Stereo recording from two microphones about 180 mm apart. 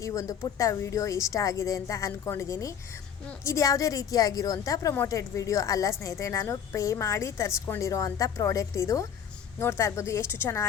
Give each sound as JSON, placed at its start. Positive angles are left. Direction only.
{"t": 0.0, "sound": "a woman's voice", "side_deg": 20}